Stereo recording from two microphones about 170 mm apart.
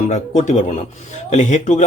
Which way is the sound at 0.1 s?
45° left (ahead or behind).